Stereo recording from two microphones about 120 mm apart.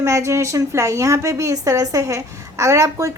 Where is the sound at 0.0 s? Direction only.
25° right (ahead or behind).